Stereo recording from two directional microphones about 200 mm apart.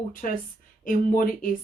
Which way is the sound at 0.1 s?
45° left (ahead or behind).